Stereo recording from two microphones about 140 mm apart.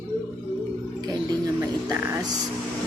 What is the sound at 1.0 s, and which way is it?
Speech, 30° right (ahead or behind).